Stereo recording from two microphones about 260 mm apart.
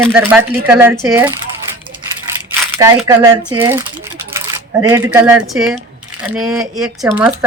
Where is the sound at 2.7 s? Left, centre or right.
Centre.